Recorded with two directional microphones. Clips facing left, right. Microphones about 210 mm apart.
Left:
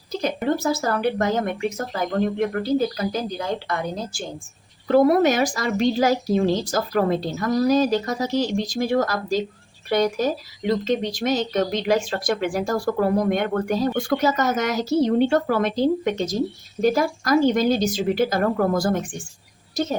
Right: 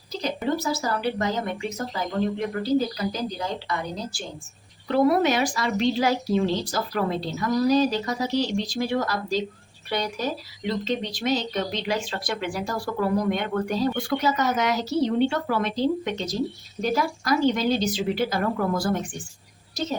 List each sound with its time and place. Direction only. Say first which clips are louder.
0.2 s a woman's voice: left 3 dB; 50° left (ahead or behind)